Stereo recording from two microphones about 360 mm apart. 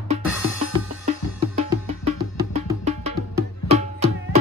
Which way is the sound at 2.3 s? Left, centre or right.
Centre.